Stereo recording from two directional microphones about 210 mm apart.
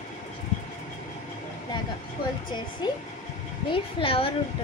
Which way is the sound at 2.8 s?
20° left (ahead or behind).